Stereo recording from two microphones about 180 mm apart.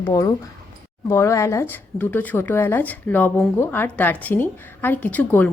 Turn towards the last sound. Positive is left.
turn(degrees=10)  # may be behind; listen again after turning